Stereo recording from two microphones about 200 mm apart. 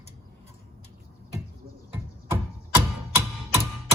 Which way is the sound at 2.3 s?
10° right (ahead or behind).